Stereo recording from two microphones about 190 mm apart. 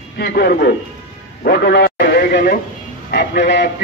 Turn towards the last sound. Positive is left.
turn(degrees=65)  # may be behind; listen again after turning